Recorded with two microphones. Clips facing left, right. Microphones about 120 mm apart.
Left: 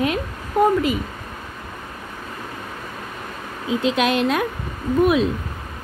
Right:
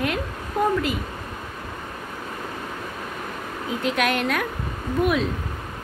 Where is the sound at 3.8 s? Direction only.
20° left (ahead or behind).